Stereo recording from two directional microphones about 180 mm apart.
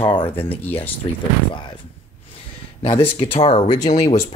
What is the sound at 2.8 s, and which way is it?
Speech, 30° left (ahead or behind).